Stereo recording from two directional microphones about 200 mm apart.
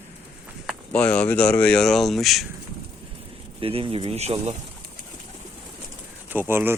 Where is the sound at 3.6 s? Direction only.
30° right (ahead or behind).